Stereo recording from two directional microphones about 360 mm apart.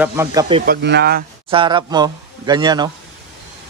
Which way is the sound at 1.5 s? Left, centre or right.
Centre.